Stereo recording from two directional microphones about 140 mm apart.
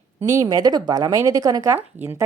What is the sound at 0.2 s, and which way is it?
A woman's voice, 20° right (ahead or behind).